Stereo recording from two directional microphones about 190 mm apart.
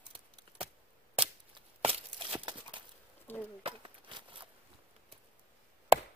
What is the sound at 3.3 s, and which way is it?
Speech, 10° left (ahead or behind).